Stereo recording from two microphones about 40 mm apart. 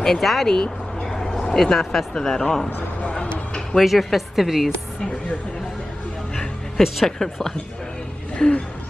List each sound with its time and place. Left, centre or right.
0.0 s speech: centre
1.1 s a sound: centre
1.5 s a woman's voice: centre
3.2 s a sound: left
3.8 s a woman's voice: centre
6.8 s speech: centre
7.2 s a woman's voice: left
8.4 s a woman's voice: centre